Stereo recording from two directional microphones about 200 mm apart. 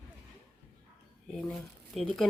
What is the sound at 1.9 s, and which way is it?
Speech, centre (ahead or behind).